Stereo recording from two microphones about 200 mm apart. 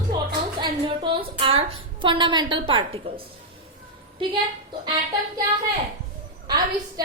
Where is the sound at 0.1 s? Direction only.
20° right (ahead or behind).